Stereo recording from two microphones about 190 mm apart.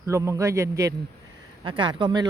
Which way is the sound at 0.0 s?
15° right (ahead or behind).